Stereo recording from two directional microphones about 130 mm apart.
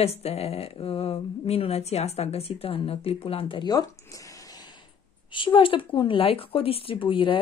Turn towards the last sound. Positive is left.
turn(degrees=40)  # may be behind; listen again after turning